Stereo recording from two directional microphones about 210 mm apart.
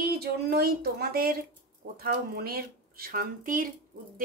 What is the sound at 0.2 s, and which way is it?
Speech, 50° right (ahead or behind).